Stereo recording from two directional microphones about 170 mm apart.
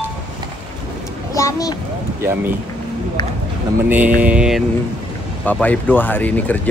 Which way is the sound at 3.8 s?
10° right (ahead or behind).